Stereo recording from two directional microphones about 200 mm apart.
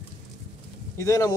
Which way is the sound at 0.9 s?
15° left (ahead or behind).